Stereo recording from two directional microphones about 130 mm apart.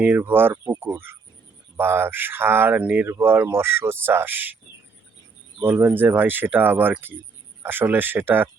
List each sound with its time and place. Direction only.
0.0 s speech: 15° right (ahead or behind)
5.6 s speech: 15° right (ahead or behind)